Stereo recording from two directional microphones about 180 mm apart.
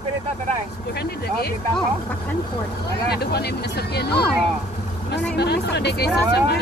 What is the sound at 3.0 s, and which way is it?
Speech, 65° left (ahead or behind).